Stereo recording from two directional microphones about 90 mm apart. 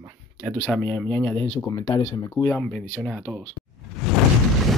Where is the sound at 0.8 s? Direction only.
20° left (ahead or behind).